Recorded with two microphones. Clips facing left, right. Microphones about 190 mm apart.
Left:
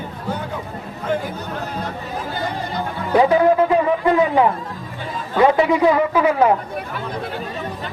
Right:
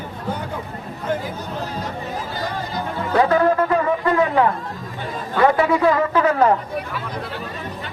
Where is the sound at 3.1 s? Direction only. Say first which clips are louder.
Left 3 dB; 15° left (ahead or behind).